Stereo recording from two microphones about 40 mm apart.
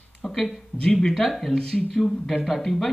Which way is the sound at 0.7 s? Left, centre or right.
Left.